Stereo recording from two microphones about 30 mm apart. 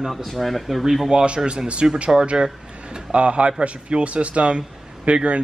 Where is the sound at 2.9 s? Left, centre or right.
Right.